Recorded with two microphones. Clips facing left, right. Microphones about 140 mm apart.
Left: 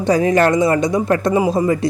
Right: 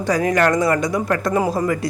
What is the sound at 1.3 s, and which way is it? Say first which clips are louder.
Speech: left 2 dB; 15° left (ahead or behind).